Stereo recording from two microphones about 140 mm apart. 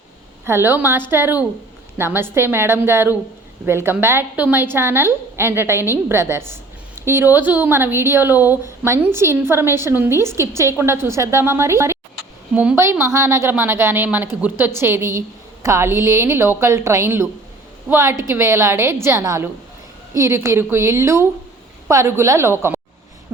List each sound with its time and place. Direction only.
0.4 s a woman's voice: 15° right (ahead or behind)